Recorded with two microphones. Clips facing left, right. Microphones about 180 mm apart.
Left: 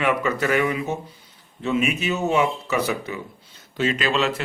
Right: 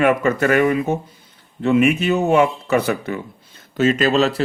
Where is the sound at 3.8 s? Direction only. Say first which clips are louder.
Right 6 dB; 45° right (ahead or behind).